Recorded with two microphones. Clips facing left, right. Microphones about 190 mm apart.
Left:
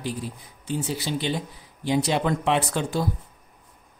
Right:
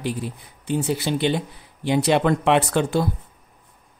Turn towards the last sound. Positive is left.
turn(degrees=-65)  # may be behind; listen again after turning